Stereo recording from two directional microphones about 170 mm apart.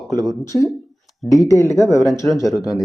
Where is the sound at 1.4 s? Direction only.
20° left (ahead or behind).